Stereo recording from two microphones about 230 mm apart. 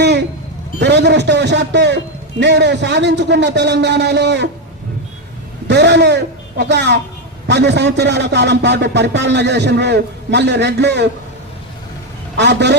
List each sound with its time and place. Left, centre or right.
0.0 s a sound: right
0.8 s a man's voice: right
5.6 s a man's voice: right
12.4 s a man's voice: right